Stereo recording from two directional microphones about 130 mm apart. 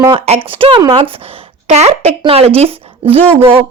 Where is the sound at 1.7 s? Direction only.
55° right (ahead or behind).